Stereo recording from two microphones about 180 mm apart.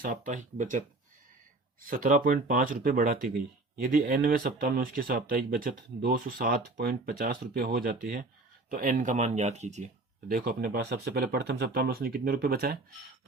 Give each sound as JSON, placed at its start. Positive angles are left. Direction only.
{"t": 0.0, "sound": "speech", "side_deg": -45}
{"t": 1.9, "sound": "speech", "side_deg": -45}